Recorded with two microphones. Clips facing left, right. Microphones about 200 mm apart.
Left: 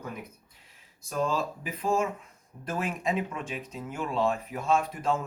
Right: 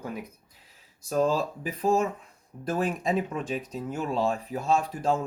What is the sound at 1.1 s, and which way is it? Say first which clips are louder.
Speech: right 4 dB; 35° right (ahead or behind).